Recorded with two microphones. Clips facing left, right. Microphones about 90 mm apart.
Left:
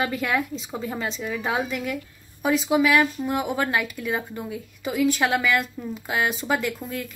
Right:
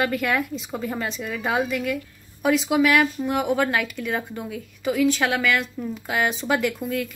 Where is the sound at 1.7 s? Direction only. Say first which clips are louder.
Right 3 dB; 20° left (ahead or behind).